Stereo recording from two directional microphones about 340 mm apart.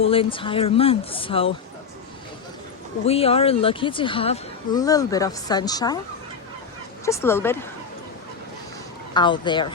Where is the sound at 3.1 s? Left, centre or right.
Centre.